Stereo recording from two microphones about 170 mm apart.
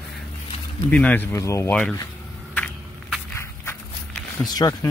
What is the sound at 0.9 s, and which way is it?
Speech, 10° left (ahead or behind).